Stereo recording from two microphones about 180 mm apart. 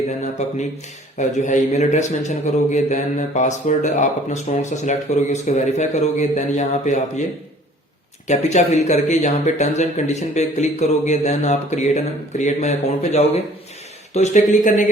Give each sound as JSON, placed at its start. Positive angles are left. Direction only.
{"t": 1.4, "sound": "speech", "side_deg": 40}
{"t": 8.3, "sound": "speech", "side_deg": 40}